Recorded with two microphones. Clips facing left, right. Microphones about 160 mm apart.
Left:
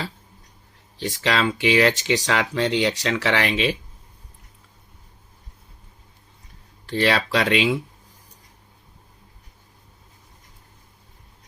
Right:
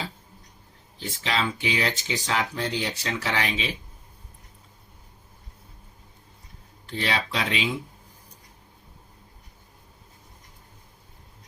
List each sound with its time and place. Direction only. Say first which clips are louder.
0.9 s speech: left 5 dB; 75° left (ahead or behind)
6.8 s speech: left 7 dB; 75° left (ahead or behind)